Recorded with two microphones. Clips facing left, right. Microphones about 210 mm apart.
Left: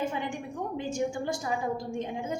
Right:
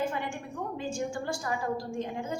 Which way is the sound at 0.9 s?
20° left (ahead or behind).